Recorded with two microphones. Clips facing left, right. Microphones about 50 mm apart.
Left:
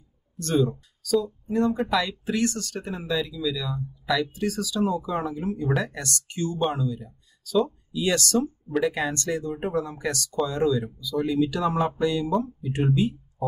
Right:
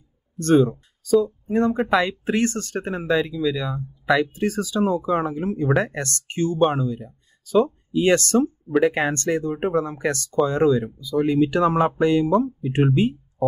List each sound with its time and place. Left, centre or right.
0.4 s speech: right
13.4 s speech: centre